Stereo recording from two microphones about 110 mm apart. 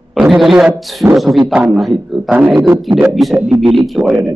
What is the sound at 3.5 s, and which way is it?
Speech, 50° right (ahead or behind).